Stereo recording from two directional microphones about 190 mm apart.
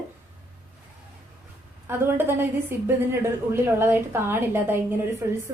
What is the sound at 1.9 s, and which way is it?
A woman's voice, 10° right (ahead or behind).